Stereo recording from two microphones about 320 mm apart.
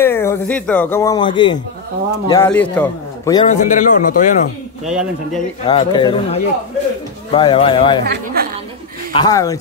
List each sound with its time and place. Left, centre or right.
0.0 s a man's voice: centre; by 4.4 s left
4.8 s a man's voice: centre
5.7 s speech: centre
8.0 s a woman's voice: right
9.1 s speech: centre